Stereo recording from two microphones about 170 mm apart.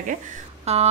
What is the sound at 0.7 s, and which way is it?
Speech, 40° right (ahead or behind).